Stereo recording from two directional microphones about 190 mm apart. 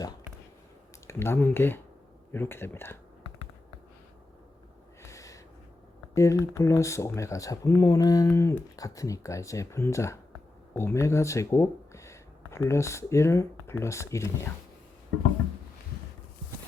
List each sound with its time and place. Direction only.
1.0 s speech: 15° left (ahead or behind)
5.0 s a sound: 15° left (ahead or behind)
6.1 s speech: 15° left (ahead or behind)